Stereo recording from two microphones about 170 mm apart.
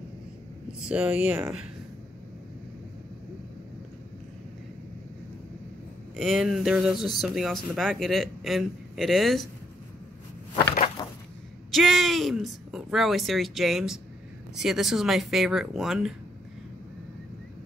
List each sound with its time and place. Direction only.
0.7 s speech: 5° right (ahead or behind)
6.1 s speech: centre (ahead or behind)
11.0 s a sound: 25° left (ahead or behind)
11.7 s speech: centre (ahead or behind)